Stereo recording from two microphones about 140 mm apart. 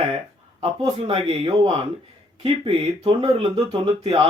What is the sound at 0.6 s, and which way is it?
A man's voice, 40° right (ahead or behind).